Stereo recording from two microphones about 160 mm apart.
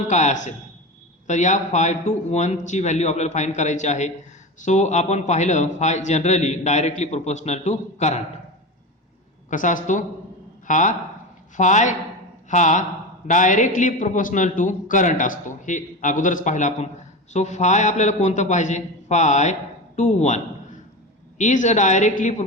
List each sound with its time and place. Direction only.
0.1 s a man's voice: 45° left (ahead or behind)
9.5 s a man's voice: 55° left (ahead or behind)